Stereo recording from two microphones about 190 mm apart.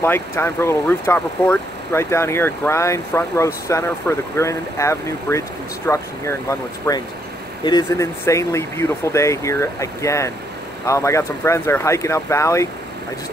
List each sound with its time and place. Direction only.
0.0 s speech: 10° left (ahead or behind)